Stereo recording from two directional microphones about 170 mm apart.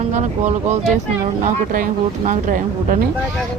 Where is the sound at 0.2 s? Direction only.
45° right (ahead or behind).